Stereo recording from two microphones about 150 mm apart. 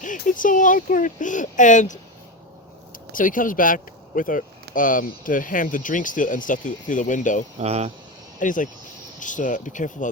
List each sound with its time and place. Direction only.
0.0 s speech: 60° left (ahead or behind)
3.1 s speech: 65° left (ahead or behind)
7.6 s speech: 45° right (ahead or behind)
8.4 s speech: 60° left (ahead or behind)